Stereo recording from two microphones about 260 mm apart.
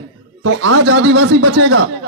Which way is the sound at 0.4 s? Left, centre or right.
Right.